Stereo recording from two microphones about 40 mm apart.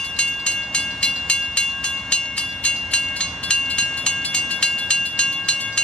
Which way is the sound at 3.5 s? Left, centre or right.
Left.